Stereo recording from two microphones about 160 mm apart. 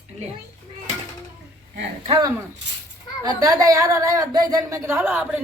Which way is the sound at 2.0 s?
30° right (ahead or behind).